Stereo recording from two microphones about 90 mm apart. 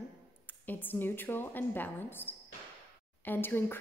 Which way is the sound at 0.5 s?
20° left (ahead or behind).